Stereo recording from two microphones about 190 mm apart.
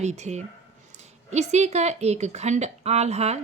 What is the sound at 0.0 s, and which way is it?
A woman's voice, 35° right (ahead or behind).